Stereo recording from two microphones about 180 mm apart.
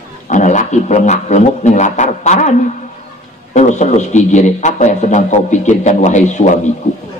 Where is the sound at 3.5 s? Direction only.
40° left (ahead or behind).